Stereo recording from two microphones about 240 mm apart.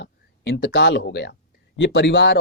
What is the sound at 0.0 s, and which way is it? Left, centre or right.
Speech, left.